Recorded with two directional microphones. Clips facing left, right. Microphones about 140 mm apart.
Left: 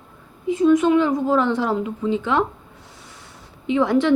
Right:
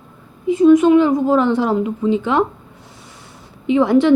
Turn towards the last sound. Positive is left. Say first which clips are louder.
# right 5 dB
turn(degrees=-15)  # may be behind; listen again after turning